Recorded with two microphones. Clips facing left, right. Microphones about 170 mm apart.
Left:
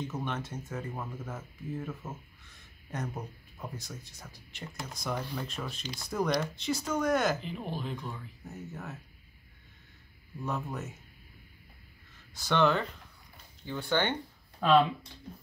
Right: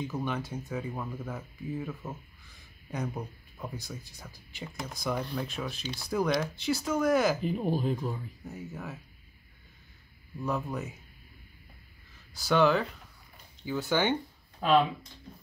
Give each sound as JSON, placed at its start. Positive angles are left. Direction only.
{"t": 0.0, "sound": "speech", "side_deg": 0}
{"t": 7.4, "sound": "speech", "side_deg": -40}
{"t": 8.0, "sound": "speech", "side_deg": 0}
{"t": 10.4, "sound": "speech", "side_deg": 0}
{"t": 12.4, "sound": "speech", "side_deg": -5}